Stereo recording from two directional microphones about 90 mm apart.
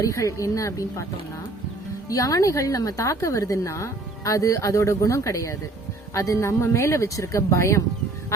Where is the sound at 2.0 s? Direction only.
40° left (ahead or behind).